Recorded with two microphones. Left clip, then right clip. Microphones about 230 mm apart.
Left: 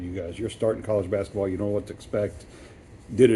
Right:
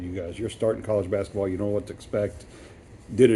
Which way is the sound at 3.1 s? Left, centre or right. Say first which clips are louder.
Even; right.